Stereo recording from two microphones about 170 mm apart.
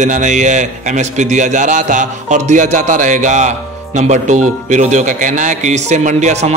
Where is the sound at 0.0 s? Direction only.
45° right (ahead or behind).